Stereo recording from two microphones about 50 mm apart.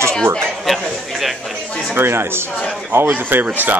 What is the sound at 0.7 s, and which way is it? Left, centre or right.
Speech, centre.